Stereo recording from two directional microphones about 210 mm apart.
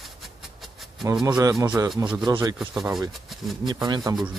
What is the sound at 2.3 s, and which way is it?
Music, 20° right (ahead or behind).